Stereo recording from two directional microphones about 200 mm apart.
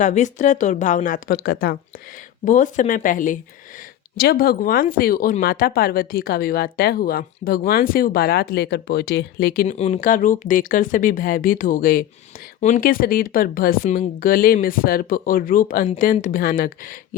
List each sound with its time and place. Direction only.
0.0 s speech: 35° left (ahead or behind)
9.7 s speech: 35° left (ahead or behind)